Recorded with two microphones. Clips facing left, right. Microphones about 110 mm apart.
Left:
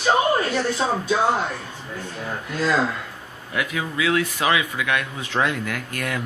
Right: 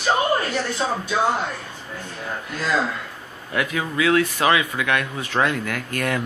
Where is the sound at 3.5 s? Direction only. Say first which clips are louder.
Right 2 dB; 10° left (ahead or behind).